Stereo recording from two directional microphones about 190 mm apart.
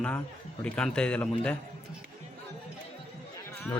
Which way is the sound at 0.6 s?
5° left (ahead or behind).